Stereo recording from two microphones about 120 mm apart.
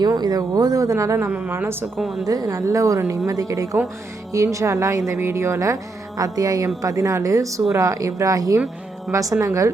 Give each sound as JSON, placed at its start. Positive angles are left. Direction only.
{"t": 0.0, "sound": "speech", "side_deg": -35}
{"t": 2.0, "sound": "a woman's voice", "side_deg": 0}
{"t": 2.2, "sound": "speech", "side_deg": -30}